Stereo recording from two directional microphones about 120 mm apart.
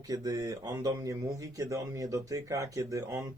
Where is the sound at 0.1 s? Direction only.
30° right (ahead or behind).